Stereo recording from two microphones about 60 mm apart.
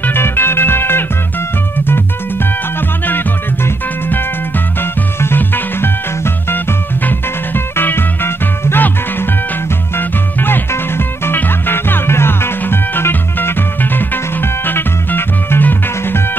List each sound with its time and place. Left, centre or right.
0.0 s music: left
3.1 s music: left